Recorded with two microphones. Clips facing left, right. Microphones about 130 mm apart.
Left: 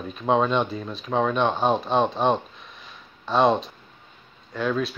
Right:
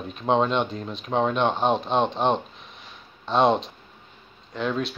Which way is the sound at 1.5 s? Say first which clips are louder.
Left 1 dB; centre (ahead or behind).